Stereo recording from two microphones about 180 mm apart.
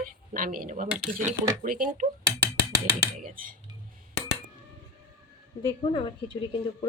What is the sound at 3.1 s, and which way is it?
Speech, 50° right (ahead or behind).